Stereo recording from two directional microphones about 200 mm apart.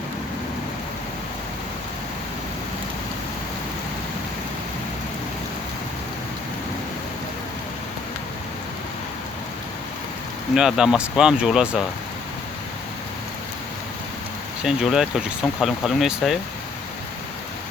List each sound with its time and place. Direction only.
10.5 s speech: 5° right (ahead or behind)
14.6 s speech: 5° right (ahead or behind)